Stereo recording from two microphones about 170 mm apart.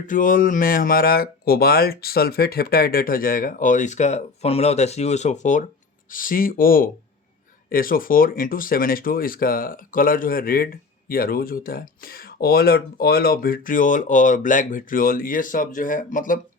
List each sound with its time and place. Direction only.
0.1 s speech: 55° left (ahead or behind)